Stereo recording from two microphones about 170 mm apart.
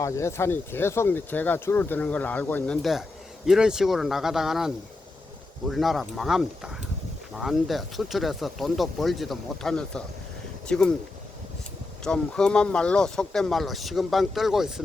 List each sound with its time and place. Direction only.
0.0 s speech: 15° left (ahead or behind)
3.4 s speech: 5° right (ahead or behind)
12.0 s speech: 5° left (ahead or behind)